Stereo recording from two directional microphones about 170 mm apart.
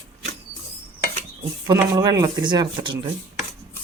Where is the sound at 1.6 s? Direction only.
20° right (ahead or behind).